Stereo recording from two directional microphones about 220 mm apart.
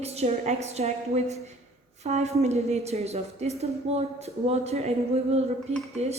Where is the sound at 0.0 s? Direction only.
30° right (ahead or behind).